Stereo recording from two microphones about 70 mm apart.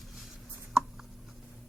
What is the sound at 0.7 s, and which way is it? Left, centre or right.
Writing, centre.